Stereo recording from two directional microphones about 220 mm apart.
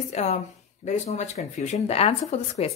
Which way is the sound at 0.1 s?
30° left (ahead or behind).